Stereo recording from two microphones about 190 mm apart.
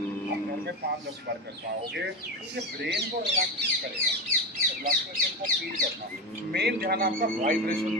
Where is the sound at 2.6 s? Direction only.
60° right (ahead or behind).